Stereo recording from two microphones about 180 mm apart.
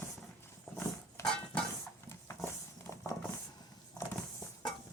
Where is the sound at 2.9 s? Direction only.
15° left (ahead or behind).